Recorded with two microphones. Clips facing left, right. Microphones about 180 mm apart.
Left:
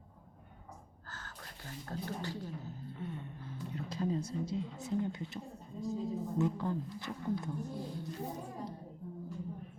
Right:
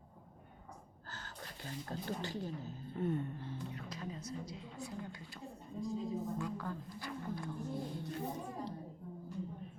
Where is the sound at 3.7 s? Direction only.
30° left (ahead or behind).